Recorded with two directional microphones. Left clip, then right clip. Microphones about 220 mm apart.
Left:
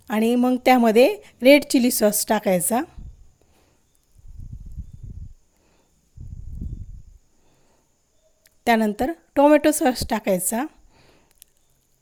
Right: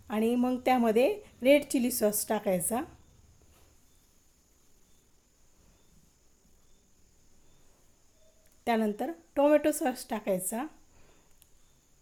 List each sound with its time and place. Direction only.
0.1 s a woman's voice: 40° left (ahead or behind)
8.6 s a woman's voice: 40° left (ahead or behind)